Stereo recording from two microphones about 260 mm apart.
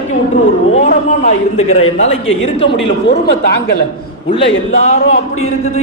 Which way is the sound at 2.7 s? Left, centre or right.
Left.